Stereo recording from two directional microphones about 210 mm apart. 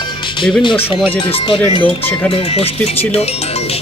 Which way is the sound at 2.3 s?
25° left (ahead or behind).